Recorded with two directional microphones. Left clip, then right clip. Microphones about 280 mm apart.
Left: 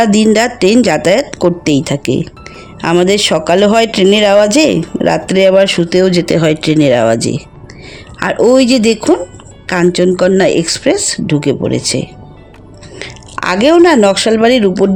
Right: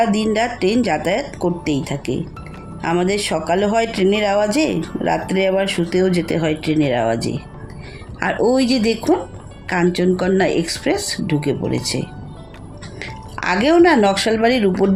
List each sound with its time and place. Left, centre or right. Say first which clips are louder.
0.0 s speech: left 8 dB; left